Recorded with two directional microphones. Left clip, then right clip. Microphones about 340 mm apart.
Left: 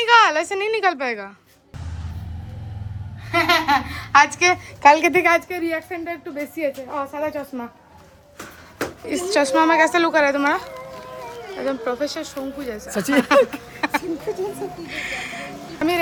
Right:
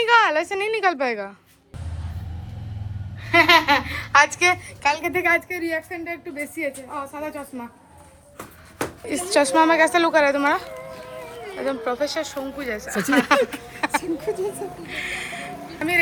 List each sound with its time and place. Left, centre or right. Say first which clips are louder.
0.0 s a woman's voice: left 3 dB; centre
3.2 s speech: right 3 dB; centre
4.9 s a woman's voice: left 4 dB; left
5.5 s speech: left 2 dB; centre
9.0 s speech: even; centre
14.8 s a sound: even; centre
15.8 s speech: left 2 dB; centre